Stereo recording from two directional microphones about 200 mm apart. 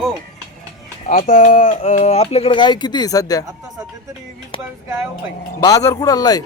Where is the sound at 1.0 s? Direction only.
40° left (ahead or behind); by 3.4 s 15° left (ahead or behind).